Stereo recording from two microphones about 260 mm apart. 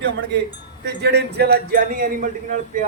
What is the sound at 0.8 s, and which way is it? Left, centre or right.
A man's voice, right.